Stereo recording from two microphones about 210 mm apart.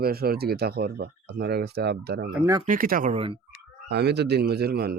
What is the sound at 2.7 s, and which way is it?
Speech, 40° right (ahead or behind).